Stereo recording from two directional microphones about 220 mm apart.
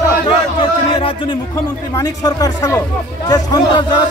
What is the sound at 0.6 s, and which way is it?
Music, 20° left (ahead or behind).